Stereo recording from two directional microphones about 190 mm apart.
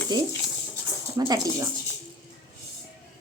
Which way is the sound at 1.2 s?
20° right (ahead or behind).